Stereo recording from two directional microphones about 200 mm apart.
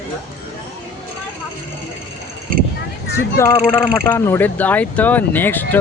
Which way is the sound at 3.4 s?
15° left (ahead or behind).